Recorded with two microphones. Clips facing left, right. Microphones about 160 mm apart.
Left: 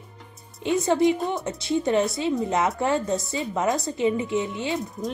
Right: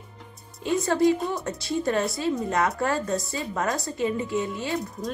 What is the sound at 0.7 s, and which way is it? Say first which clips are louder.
Speech: left 1 dB; 20° left (ahead or behind).